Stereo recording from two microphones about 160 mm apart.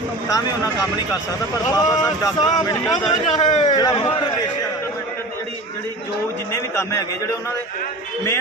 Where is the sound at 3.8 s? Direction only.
25° left (ahead or behind).